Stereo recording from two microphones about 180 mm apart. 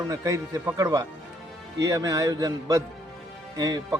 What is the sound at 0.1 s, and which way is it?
Speech, 15° right (ahead or behind).